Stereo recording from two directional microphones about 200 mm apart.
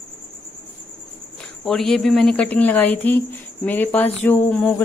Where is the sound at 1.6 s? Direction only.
Centre (ahead or behind).